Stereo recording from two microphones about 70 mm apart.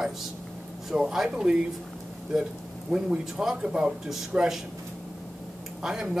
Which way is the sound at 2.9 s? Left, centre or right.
Centre.